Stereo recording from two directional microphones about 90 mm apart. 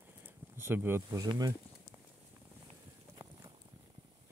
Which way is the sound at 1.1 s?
45° right (ahead or behind).